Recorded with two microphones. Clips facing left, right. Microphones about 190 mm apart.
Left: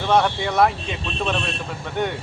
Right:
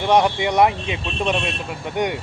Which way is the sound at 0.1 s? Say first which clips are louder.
Right 2 dB; 15° right (ahead or behind).